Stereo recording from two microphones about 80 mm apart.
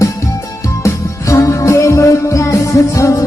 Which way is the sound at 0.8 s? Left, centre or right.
Left.